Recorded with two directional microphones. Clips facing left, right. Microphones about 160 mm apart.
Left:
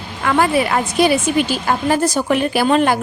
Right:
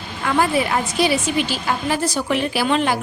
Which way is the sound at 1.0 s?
55° left (ahead or behind).